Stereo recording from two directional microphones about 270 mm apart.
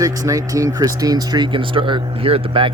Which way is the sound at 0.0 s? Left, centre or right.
Centre.